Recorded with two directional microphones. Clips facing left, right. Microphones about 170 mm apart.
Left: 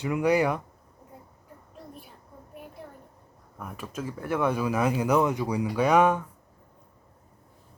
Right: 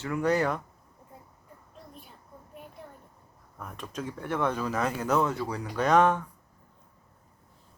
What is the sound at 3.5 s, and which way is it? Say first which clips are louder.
Speech: left 2 dB; 5° left (ahead or behind).